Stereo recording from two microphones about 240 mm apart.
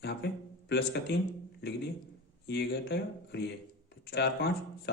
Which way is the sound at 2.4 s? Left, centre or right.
Left.